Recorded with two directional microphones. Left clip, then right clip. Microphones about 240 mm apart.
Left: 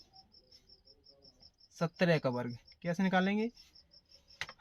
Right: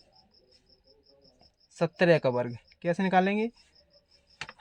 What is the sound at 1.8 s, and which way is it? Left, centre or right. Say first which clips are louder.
Speech: right 8 dB; right.